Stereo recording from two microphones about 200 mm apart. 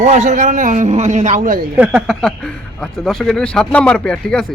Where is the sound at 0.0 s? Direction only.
35° right (ahead or behind).